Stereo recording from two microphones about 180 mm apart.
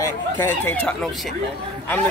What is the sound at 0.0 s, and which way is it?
Speech, 10° left (ahead or behind).